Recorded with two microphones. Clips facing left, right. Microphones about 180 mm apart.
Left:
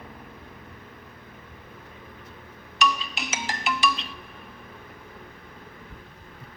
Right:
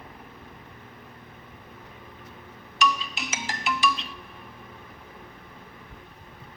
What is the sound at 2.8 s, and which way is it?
Music, 65° left (ahead or behind).